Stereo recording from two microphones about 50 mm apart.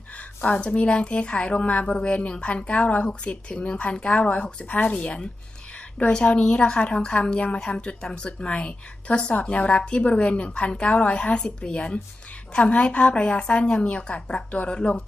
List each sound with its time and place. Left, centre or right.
0.2 s a woman's voice: left